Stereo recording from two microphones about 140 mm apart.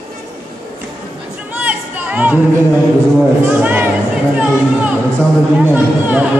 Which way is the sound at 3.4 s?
10° right (ahead or behind).